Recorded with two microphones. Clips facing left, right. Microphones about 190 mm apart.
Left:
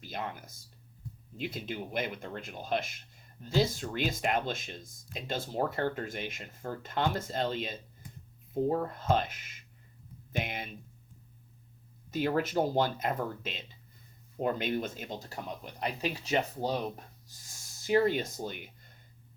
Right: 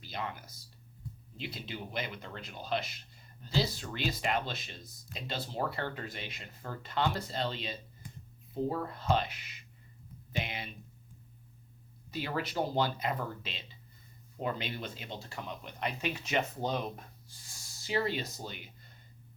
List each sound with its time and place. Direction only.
0.0 s speech: 50° left (ahead or behind)
12.1 s speech: 50° left (ahead or behind)
17.8 s speech: 50° left (ahead or behind)